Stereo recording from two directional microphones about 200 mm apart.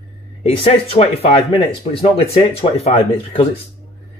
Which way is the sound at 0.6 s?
30° left (ahead or behind).